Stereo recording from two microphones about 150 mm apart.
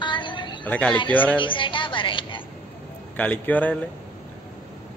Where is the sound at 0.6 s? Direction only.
10° left (ahead or behind).